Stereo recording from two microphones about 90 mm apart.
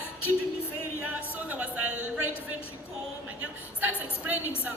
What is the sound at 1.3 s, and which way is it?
Speech, 15° right (ahead or behind).